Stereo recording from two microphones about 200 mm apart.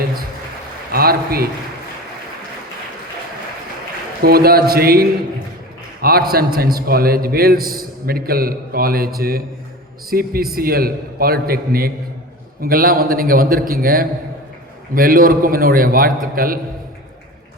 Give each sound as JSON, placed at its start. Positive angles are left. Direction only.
{"t": 0.9, "sound": "a man's voice", "side_deg": -50}
{"t": 4.2, "sound": "a man's voice", "side_deg": -50}